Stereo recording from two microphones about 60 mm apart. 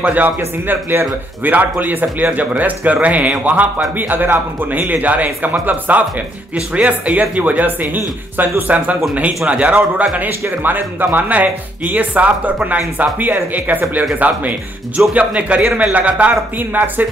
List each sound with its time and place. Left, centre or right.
0.0 s speech: right
15.1 s speech: right